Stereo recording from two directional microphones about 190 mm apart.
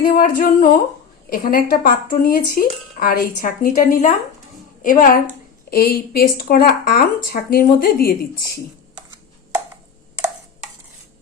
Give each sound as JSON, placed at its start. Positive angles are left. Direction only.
{"t": 0.0, "sound": "speech", "side_deg": 45}